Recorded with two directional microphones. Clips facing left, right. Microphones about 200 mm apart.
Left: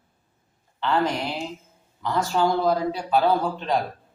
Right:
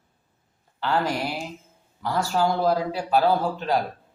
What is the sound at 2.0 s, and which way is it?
Speech, 5° right (ahead or behind).